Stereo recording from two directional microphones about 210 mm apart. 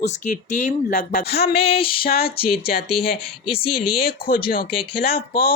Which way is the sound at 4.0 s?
45° left (ahead or behind).